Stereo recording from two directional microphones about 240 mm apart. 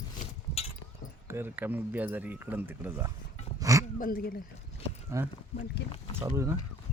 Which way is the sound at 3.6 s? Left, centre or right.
Centre.